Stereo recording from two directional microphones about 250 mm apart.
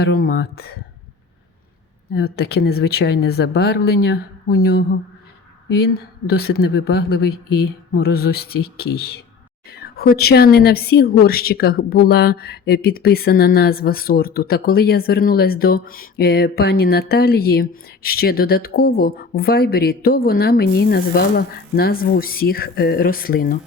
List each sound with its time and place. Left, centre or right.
0.0 s a woman's voice: left
2.1 s a woman's voice: left
5.8 s a woman's voice: left